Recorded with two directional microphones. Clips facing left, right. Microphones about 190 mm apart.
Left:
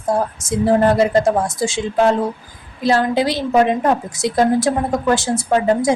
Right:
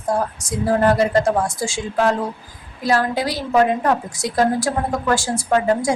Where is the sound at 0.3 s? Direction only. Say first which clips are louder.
Left 4 dB; 25° left (ahead or behind).